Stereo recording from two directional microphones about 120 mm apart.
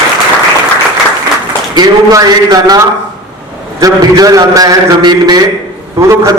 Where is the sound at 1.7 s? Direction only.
35° right (ahead or behind).